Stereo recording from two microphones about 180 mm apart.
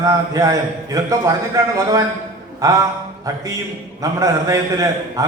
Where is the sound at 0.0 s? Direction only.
20° right (ahead or behind).